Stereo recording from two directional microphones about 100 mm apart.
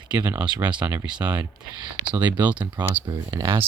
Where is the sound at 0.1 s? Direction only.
20° right (ahead or behind).